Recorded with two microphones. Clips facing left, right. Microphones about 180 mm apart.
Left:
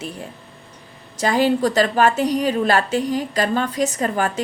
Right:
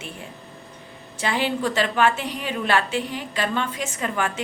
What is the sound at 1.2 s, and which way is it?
A woman's voice, 40° left (ahead or behind).